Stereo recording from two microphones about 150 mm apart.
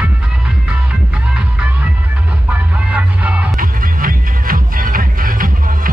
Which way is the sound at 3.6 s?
70° right (ahead or behind).